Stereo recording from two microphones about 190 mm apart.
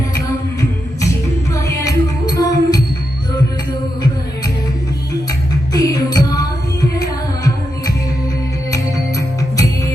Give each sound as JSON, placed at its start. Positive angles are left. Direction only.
{"t": 1.5, "sound": "music", "side_deg": 15}
{"t": 5.7, "sound": "music", "side_deg": 20}